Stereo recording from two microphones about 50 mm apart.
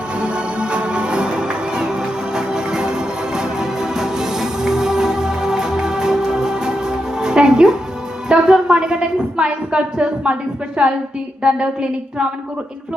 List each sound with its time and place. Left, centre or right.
0.2 s music: right
8.3 s a woman's voice: centre